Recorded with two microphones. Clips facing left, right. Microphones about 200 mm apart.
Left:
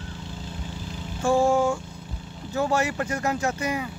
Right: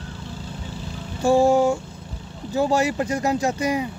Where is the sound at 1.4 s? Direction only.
20° right (ahead or behind).